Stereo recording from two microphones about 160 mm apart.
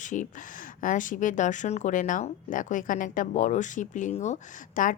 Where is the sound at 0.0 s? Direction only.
50° left (ahead or behind).